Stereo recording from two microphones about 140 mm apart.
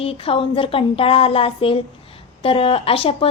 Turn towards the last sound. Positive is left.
turn(degrees=40)  # may be behind; listen again after turning